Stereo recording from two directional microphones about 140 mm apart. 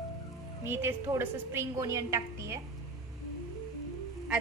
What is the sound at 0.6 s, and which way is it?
A woman's voice, 15° right (ahead or behind).